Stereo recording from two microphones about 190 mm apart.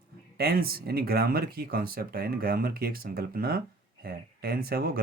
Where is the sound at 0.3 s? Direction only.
55° right (ahead or behind).